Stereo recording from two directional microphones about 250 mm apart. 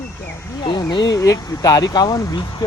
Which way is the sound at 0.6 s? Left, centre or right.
Centre.